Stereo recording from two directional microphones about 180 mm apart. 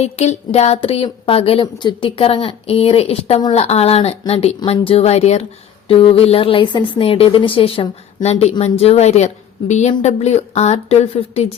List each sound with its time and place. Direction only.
0.0 s a woman's voice: 35° left (ahead or behind)